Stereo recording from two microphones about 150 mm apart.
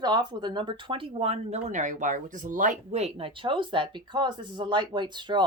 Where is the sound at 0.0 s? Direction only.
30° right (ahead or behind).